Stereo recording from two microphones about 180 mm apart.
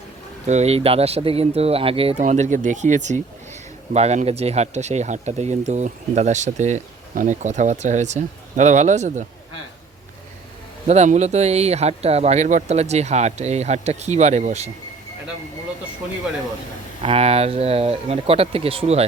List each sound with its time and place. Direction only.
0.4 s speech: 40° right (ahead or behind)
2.2 s speech: 40° right (ahead or behind)
10.8 s speech: 40° right (ahead or behind)
17.0 s speech: 35° right (ahead or behind)